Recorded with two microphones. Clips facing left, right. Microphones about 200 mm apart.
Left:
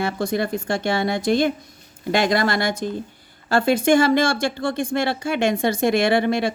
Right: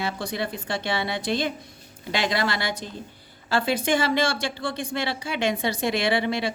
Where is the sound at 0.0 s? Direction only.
50° left (ahead or behind).